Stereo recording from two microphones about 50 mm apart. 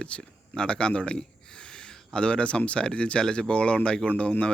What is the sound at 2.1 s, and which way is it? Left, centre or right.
Speech, centre.